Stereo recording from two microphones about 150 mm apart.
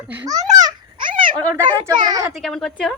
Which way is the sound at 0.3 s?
25° right (ahead or behind).